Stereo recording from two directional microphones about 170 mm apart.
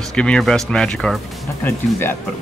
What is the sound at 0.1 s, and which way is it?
Speech, 5° left (ahead or behind).